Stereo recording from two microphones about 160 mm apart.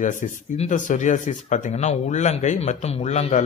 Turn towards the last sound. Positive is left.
turn(degrees=45)  # may be behind; listen again after turning